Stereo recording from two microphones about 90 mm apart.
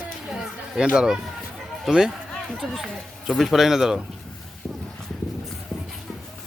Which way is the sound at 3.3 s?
Centre (ahead or behind).